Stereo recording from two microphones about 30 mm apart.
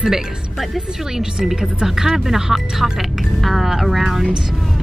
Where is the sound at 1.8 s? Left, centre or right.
Centre.